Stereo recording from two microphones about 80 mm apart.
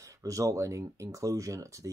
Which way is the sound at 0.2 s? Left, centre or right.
Right.